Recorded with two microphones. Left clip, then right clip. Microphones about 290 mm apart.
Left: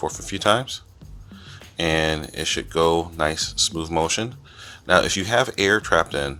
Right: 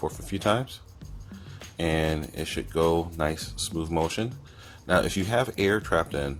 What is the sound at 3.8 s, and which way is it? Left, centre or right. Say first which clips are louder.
Speech: left 5 dB; left.